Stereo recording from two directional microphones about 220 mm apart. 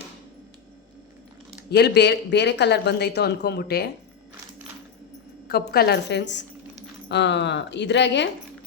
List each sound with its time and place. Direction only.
1.7 s speech: 50° left (ahead or behind)
5.5 s speech: 45° left (ahead or behind)